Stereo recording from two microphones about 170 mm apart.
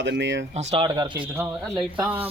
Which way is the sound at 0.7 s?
30° right (ahead or behind).